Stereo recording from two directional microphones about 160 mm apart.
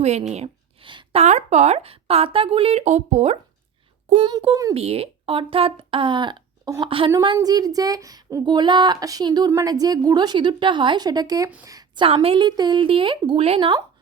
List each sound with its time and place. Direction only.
0.0 s a woman's voice: 45° right (ahead or behind)
1.2 s speech: 45° right (ahead or behind)
4.1 s speech: 30° right (ahead or behind)
4.7 s a woman's voice: 40° right (ahead or behind); by 12.0 s 25° right (ahead or behind)
12.0 s speech: 35° right (ahead or behind)